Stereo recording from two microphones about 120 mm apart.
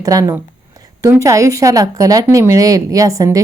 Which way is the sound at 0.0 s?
30° right (ahead or behind).